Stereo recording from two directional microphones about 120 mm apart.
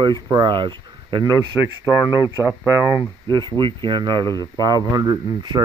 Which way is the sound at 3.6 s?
40° right (ahead or behind).